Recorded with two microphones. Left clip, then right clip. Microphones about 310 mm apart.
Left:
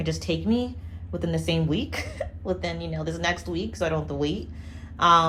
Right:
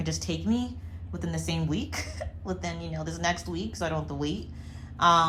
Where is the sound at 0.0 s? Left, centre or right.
Centre.